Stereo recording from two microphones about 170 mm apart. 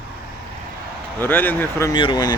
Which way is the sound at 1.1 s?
10° left (ahead or behind).